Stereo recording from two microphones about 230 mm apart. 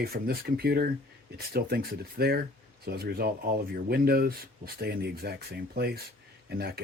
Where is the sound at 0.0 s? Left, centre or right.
Right.